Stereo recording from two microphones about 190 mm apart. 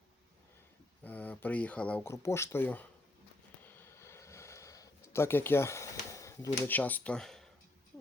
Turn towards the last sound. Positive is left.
turn(degrees=0)  # may be behind; listen again after turning